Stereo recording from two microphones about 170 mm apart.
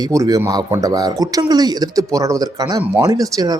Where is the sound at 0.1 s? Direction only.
20° right (ahead or behind).